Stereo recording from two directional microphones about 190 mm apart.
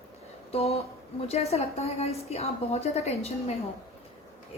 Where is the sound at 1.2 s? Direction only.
35° left (ahead or behind).